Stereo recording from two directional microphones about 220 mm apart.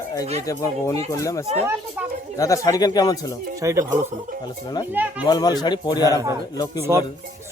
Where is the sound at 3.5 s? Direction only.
15° right (ahead or behind).